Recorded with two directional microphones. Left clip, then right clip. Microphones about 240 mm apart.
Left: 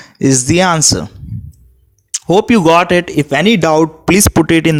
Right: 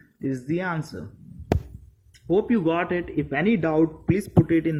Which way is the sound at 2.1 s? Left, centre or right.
Left.